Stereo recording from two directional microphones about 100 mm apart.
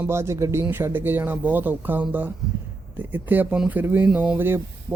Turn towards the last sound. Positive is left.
turn(degrees=-20)  # may be behind; listen again after turning